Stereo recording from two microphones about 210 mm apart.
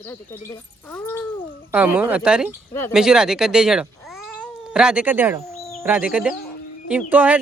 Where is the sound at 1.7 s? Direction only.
10° right (ahead or behind).